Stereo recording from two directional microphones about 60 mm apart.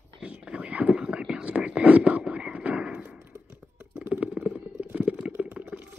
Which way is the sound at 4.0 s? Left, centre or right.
Right.